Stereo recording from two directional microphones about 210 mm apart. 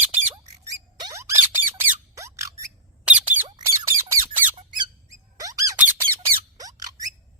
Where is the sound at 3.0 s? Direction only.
5° right (ahead or behind).